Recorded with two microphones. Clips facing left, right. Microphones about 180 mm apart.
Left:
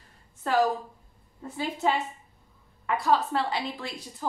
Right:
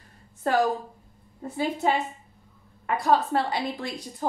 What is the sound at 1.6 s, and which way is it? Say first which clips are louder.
Speech: right 2 dB; 45° right (ahead or behind).